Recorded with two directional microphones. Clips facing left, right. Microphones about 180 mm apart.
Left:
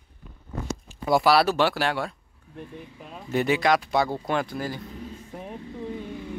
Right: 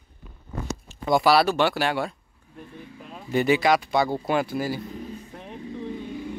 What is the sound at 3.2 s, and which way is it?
Speech, centre (ahead or behind).